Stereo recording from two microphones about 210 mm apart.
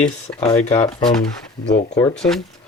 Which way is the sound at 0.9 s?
25° left (ahead or behind).